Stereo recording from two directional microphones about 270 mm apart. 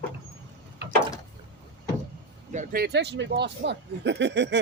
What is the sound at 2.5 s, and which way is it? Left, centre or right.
Speech, right.